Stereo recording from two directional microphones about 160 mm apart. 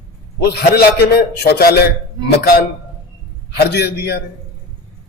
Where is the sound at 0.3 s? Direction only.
90° left.